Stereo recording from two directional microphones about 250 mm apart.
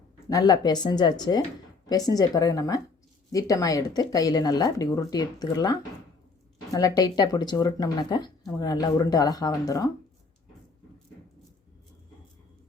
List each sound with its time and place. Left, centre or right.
0.3 s speech: centre